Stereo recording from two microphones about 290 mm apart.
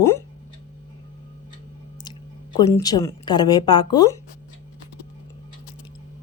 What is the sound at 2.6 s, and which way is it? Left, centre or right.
A woman's voice, centre.